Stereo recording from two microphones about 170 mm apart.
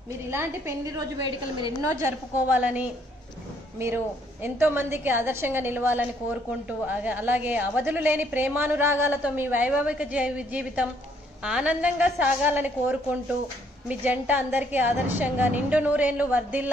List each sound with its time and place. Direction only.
0.3 s a woman's voice: 15° right (ahead or behind)